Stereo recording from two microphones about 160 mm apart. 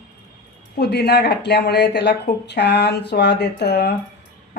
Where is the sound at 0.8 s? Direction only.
90° left.